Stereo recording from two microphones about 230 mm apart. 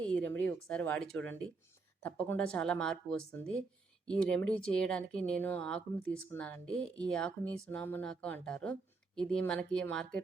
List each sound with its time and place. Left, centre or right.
0.0 s speech: centre